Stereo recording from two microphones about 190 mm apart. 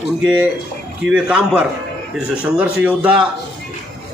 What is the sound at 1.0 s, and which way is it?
Speech, 5° right (ahead or behind).